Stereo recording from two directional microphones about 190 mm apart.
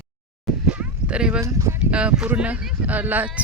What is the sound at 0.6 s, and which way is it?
Dog, 5° right (ahead or behind).